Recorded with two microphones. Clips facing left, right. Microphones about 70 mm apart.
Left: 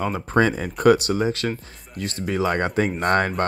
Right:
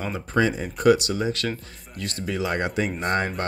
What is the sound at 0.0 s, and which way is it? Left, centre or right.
Speech, left.